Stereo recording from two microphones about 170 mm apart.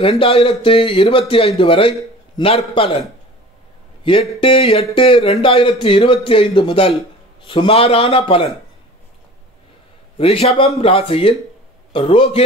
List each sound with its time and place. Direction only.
0.0 s speech: 35° left (ahead or behind)
4.0 s speech: 30° left (ahead or behind)
10.1 s speech: 35° left (ahead or behind)